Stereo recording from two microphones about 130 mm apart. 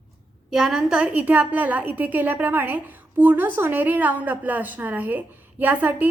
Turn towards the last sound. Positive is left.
turn(degrees=-15)  # may be behind; listen again after turning